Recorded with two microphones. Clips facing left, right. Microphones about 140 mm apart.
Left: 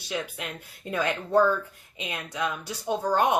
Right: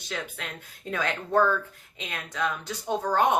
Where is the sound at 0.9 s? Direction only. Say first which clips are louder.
Left 2 dB; 10° left (ahead or behind).